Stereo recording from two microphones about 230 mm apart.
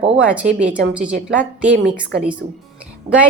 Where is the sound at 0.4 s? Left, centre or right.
Right.